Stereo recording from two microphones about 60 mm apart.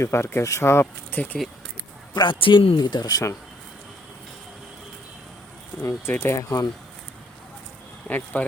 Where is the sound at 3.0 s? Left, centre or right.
Left.